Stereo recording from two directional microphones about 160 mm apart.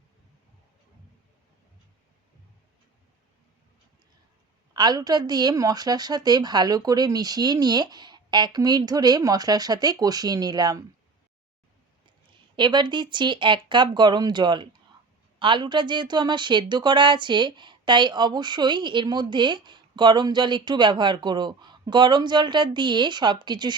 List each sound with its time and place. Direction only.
4.7 s speech: 25° right (ahead or behind)
12.5 s speech: 30° right (ahead or behind)